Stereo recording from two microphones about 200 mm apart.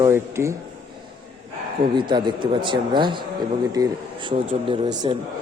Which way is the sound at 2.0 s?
20° right (ahead or behind).